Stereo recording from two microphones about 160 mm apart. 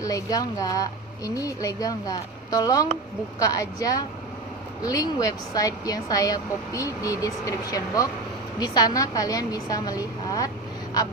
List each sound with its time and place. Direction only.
0.0 s speech: 20° left (ahead or behind)